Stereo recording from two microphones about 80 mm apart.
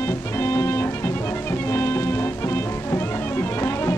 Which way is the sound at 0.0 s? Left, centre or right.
Left.